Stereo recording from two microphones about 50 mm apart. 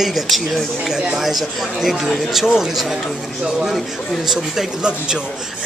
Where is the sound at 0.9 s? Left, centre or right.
Centre.